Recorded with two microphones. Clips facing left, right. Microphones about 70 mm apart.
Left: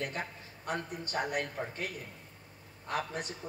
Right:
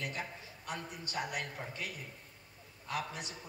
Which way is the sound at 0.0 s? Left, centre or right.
Left.